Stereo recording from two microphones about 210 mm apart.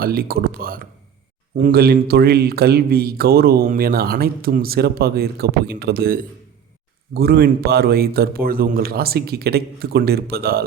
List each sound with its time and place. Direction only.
0.0 s a man's voice: 45° right (ahead or behind)